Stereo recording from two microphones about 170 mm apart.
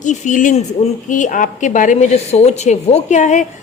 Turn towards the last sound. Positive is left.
turn(degrees=45)  # may be behind; listen again after turning